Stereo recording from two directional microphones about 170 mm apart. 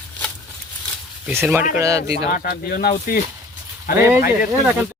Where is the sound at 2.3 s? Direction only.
55° left (ahead or behind).